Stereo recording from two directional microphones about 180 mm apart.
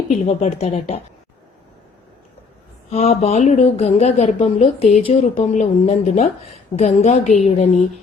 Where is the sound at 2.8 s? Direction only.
35° left (ahead or behind).